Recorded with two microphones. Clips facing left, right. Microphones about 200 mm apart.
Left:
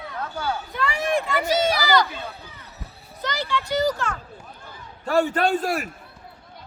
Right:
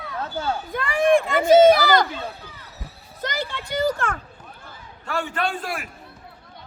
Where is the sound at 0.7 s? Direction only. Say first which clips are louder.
Right 7 dB; 50° right (ahead or behind).